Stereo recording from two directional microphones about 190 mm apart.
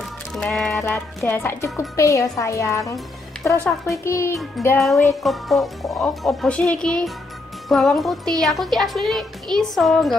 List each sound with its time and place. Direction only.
0.3 s music: centre (ahead or behind)
0.8 s speech: 10° left (ahead or behind)
4.6 s music: centre (ahead or behind)